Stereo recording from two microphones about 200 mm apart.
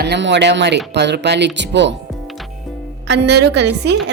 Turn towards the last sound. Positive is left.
turn(degrees=-60)  # may be behind; listen again after turning